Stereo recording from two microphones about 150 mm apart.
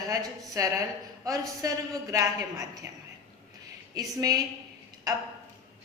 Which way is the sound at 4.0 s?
25° right (ahead or behind).